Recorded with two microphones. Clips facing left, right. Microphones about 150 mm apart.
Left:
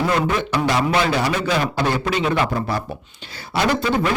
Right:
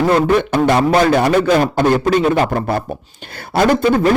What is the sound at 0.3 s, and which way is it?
A man's voice, 55° right (ahead or behind).